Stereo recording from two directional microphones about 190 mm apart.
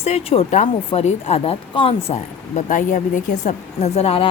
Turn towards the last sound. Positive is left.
turn(degrees=35)  # may be behind; listen again after turning